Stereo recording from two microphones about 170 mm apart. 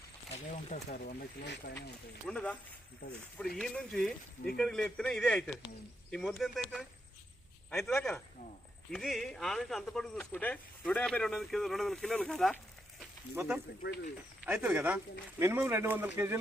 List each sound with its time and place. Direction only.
0.3 s speech: 40° left (ahead or behind)
0.9 s speech: 60° left (ahead or behind)
2.2 s speech: 5° left (ahead or behind)
13.3 s speech: 10° right (ahead or behind)